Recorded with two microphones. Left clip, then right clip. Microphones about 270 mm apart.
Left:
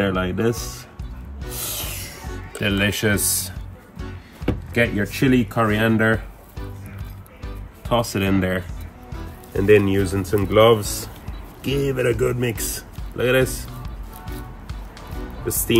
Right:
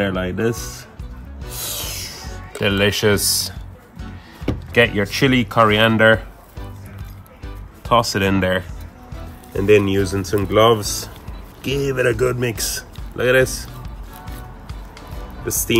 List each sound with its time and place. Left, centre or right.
0.0 s a man's voice: centre
1.5 s rub: centre
2.6 s speech: centre
4.4 s power windows: centre
4.7 s speech: right
7.9 s a man's voice: centre
15.4 s speech: centre